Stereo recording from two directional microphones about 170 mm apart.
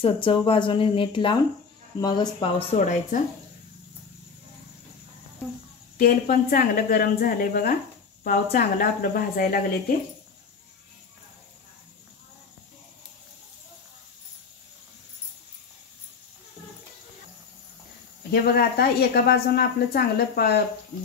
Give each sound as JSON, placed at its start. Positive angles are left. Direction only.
{"t": 0.0, "sound": "speech", "side_deg": 30}
{"t": 5.9, "sound": "a woman's voice", "side_deg": 60}
{"t": 18.3, "sound": "a woman's voice", "side_deg": 65}